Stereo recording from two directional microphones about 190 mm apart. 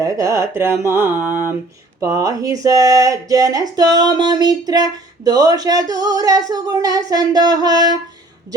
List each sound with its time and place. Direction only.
0.0 s mantra: 15° right (ahead or behind)
2.0 s speech: 20° right (ahead or behind)